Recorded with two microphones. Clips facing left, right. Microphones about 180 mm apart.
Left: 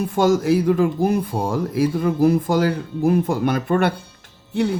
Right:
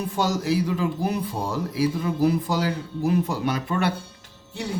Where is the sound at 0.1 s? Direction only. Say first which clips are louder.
Left 8 dB; 50° left (ahead or behind).